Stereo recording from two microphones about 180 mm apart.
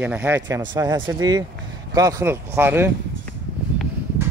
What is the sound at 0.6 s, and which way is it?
Speech, 20° right (ahead or behind).